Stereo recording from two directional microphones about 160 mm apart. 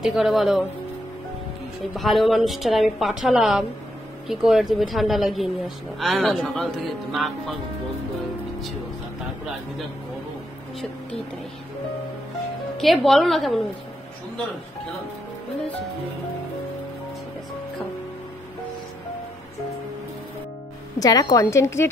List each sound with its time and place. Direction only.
0.0 s a woman's voice: centre (ahead or behind)
2.0 s a woman's voice: centre (ahead or behind)
12.7 s a woman's voice: centre (ahead or behind)
21.0 s a woman's voice: 25° left (ahead or behind)